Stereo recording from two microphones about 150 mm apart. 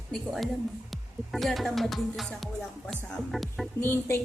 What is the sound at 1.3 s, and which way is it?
Speech, centre (ahead or behind).